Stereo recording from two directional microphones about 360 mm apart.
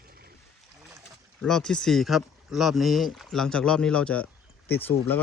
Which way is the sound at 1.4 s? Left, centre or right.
Centre.